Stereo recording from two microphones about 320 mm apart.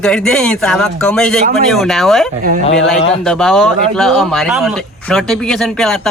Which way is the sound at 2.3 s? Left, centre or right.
Right.